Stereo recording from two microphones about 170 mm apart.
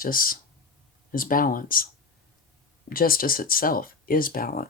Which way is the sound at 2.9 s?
60° left (ahead or behind).